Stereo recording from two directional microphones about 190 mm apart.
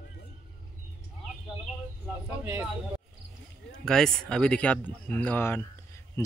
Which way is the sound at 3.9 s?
5° left (ahead or behind).